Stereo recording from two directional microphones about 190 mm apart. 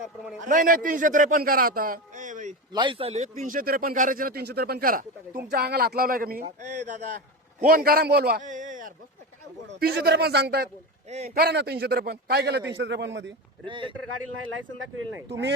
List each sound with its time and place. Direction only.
0.4 s a man's voice: 45° right (ahead or behind)
2.7 s a man's voice: 25° right (ahead or behind)
7.6 s a man's voice: 55° right (ahead or behind)
9.6 s a man's voice: 60° right (ahead or behind)
13.7 s speech: 25° right (ahead or behind)
15.3 s a man's voice: 65° right (ahead or behind)